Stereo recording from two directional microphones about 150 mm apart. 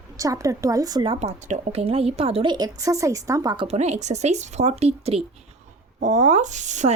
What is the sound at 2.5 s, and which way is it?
A woman's voice, 25° right (ahead or behind).